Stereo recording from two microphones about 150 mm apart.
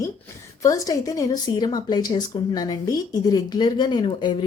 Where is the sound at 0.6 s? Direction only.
20° left (ahead or behind).